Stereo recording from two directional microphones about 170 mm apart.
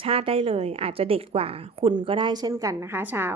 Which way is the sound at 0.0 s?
35° right (ahead or behind).